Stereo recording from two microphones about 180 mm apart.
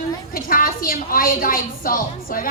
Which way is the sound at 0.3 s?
50° left (ahead or behind).